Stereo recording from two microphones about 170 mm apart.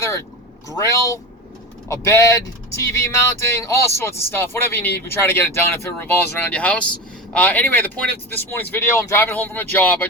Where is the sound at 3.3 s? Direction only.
15° left (ahead or behind).